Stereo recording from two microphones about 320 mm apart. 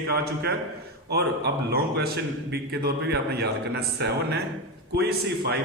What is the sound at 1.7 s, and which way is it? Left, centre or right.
A man's voice, right.